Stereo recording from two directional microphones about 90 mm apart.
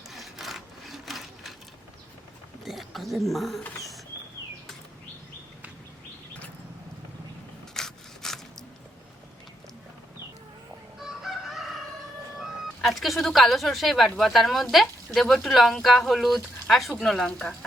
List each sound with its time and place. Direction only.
0.1 s sewing machine: centre (ahead or behind)
2.6 s speech: centre (ahead or behind)
7.7 s a sound: 5° left (ahead or behind)
11.0 s chicken: 5° right (ahead or behind)
12.4 s speech: centre (ahead or behind)